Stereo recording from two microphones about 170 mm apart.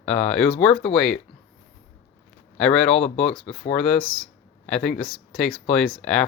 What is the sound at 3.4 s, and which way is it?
Speech, 35° left (ahead or behind).